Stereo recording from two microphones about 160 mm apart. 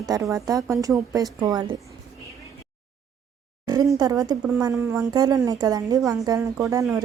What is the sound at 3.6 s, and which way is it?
A woman's voice, 25° right (ahead or behind).